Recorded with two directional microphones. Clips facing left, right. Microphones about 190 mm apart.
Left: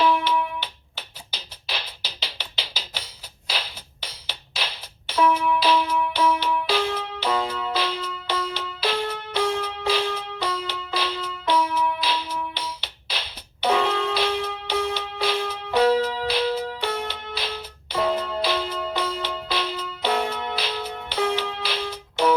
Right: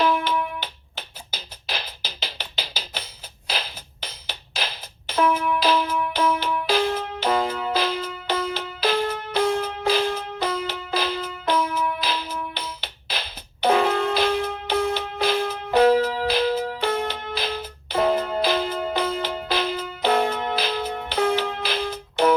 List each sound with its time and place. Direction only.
0.0 s music: 45° right (ahead or behind)
4.0 s music: 45° right (ahead or behind)